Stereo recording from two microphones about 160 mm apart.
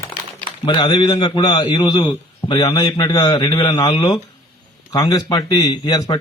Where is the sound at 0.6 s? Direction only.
30° left (ahead or behind).